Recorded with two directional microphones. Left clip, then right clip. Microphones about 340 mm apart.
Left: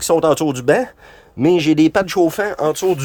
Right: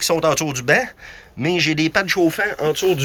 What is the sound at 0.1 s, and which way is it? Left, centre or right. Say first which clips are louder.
Speech: left 6 dB; left.